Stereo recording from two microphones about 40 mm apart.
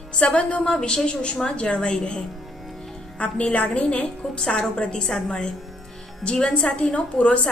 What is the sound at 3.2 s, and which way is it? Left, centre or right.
A woman's voice, left.